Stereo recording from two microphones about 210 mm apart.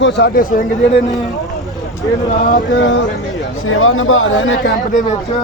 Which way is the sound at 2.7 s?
60° left (ahead or behind).